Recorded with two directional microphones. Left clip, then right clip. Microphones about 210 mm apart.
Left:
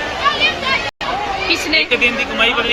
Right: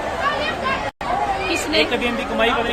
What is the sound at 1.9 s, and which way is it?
Speech, 50° right (ahead or behind).